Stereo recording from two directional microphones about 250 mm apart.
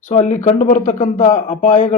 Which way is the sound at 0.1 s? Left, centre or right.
Left.